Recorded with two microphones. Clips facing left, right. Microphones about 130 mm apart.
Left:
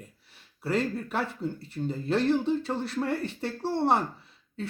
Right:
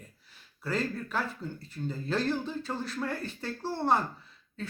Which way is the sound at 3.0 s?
70° left (ahead or behind).